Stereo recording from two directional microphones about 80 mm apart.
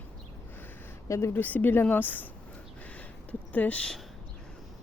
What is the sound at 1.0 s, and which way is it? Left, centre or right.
Speech, left.